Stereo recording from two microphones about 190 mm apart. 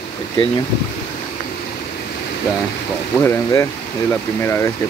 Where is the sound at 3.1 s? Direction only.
10° left (ahead or behind).